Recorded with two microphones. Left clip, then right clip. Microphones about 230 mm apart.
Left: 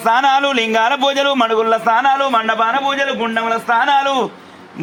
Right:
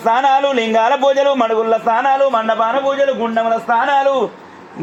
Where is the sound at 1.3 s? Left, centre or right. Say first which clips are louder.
Even; left.